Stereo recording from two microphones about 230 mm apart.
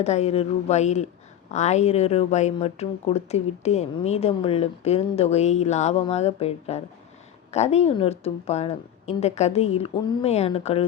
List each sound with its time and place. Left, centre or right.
0.0 s speech: left